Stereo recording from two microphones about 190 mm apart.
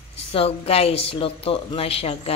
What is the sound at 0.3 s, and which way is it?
Speech, 30° left (ahead or behind).